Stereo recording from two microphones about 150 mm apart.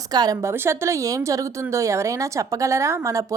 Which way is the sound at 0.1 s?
25° right (ahead or behind).